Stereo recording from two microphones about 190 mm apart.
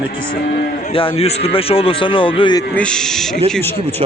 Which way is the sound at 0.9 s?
30° left (ahead or behind).